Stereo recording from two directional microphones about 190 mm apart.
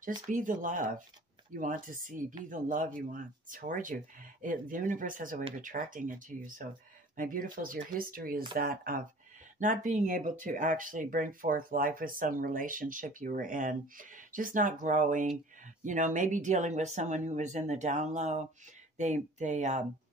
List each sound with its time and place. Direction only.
0.3 s speech: 45° right (ahead or behind)